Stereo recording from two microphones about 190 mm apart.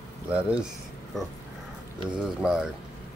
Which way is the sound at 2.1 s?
5° right (ahead or behind).